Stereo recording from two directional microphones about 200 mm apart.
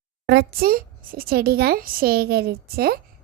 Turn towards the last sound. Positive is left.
turn(degrees=-50)  # may be behind; listen again after turning